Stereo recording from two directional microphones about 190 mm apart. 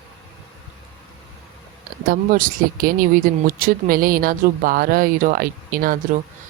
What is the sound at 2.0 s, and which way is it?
Speech, 50° right (ahead or behind).